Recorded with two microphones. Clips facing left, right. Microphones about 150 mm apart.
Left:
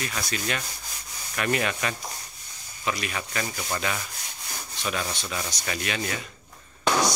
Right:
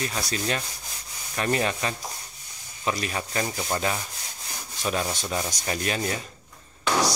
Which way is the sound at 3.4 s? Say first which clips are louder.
Right 3 dB; 25° right (ahead or behind).